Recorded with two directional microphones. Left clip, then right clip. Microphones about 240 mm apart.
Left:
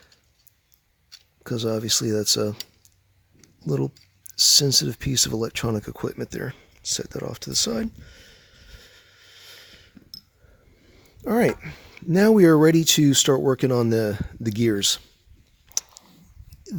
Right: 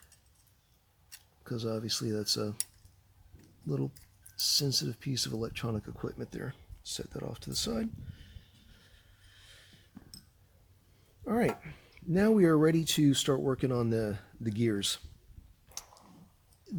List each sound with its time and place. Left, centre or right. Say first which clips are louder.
1.5 s speech: left 11 dB; left
3.4 s typing: left 10 dB; left
4.4 s speech: left 12 dB; left
11.2 s speech: left 10 dB; left
16.0 s a sound: left 8 dB; left